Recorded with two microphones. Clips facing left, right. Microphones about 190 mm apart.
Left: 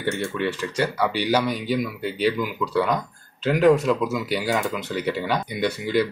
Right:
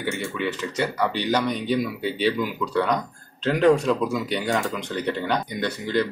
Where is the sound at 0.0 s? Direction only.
20° right (ahead or behind).